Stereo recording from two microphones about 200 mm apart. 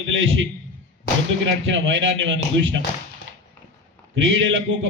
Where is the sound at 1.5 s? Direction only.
70° right (ahead or behind).